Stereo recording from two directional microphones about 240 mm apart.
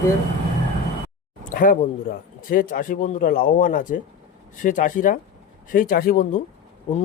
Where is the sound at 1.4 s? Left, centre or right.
Left.